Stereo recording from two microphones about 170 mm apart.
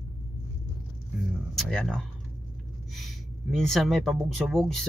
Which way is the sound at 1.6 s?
5° left (ahead or behind).